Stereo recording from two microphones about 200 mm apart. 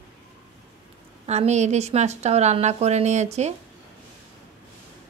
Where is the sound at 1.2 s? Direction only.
35° right (ahead or behind).